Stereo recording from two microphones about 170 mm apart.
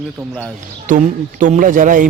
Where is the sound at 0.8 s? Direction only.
50° right (ahead or behind).